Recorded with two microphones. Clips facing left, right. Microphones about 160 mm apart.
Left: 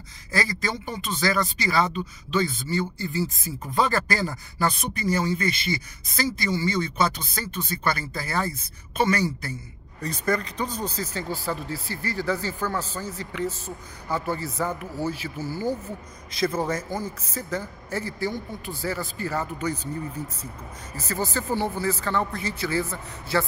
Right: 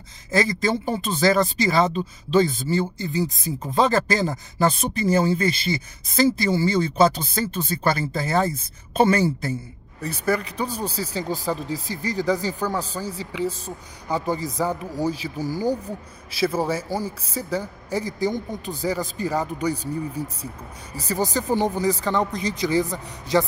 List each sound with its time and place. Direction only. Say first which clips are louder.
0.3 s speech: right 6 dB; 25° right (ahead or behind)
10.0 s speech: right 2 dB; 5° right (ahead or behind)